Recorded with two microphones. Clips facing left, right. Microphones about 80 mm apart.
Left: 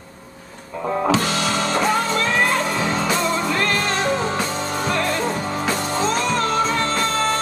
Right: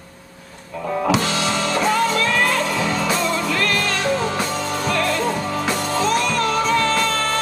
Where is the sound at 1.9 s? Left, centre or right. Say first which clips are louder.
Right 1 dB; left.